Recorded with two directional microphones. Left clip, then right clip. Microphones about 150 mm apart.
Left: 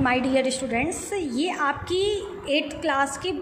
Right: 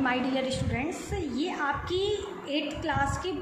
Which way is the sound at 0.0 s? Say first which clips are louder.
Left 6 dB; 50° left (ahead or behind).